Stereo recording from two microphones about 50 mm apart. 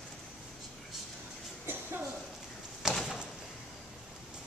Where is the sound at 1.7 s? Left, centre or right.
Right.